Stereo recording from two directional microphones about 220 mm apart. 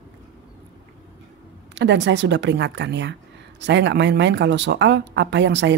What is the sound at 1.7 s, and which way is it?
A woman's voice, 55° right (ahead or behind).